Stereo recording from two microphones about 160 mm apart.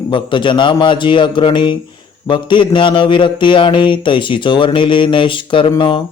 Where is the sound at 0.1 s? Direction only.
30° left (ahead or behind).